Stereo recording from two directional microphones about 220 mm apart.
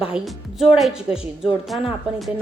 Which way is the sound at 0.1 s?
5° right (ahead or behind).